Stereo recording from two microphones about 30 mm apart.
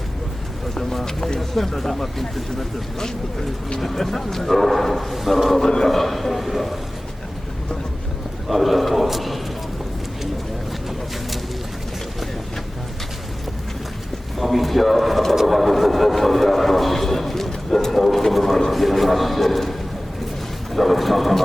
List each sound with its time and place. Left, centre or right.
0.7 s speech: centre
3.8 s speech: centre
5.1 s a man's voice: centre
5.6 s a man's voice: left
5.9 s a man's voice: centre
8.4 s a man's voice: centre
10.7 s a sound: centre
14.3 s a sound: centre
18.7 s a man's voice: centre
20.7 s a man's voice: centre